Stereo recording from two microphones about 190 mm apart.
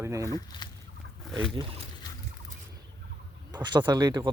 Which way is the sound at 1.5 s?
30° right (ahead or behind).